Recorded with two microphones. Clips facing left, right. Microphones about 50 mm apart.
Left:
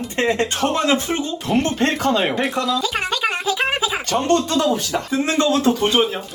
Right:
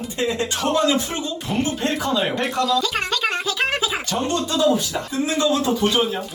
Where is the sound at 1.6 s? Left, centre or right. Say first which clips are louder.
Left 4 dB; left.